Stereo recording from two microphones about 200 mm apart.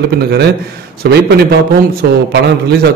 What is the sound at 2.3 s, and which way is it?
Speech, 55° right (ahead or behind).